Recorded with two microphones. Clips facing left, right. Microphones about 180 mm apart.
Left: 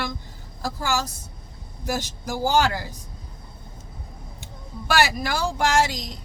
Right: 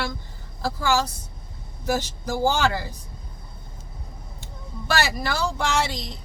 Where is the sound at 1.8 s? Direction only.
15° left (ahead or behind).